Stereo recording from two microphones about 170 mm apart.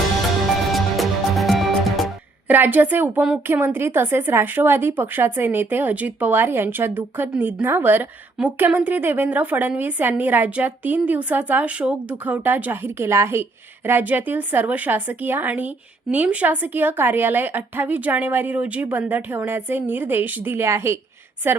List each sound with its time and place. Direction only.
0.7 s music: centre (ahead or behind)
2.5 s a woman's voice: 10° right (ahead or behind)